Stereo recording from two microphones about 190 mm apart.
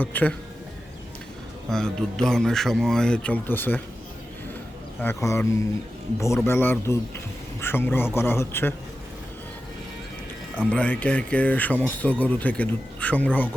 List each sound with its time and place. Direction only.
0.0 s speech: 10° left (ahead or behind)
1.7 s speech: 5° left (ahead or behind)
4.9 s speech: 15° left (ahead or behind)
10.7 s speech: 5° left (ahead or behind)